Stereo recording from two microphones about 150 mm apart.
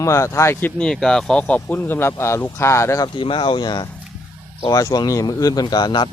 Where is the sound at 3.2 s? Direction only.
35° left (ahead or behind).